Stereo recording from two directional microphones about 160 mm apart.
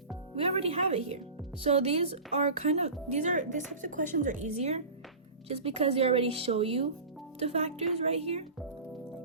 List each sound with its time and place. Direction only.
0.3 s a woman's voice: 40° right (ahead or behind)